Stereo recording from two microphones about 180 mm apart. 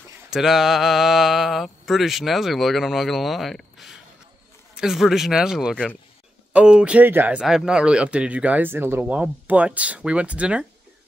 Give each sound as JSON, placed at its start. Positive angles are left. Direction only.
{"t": 0.3, "sound": "speech", "side_deg": 0}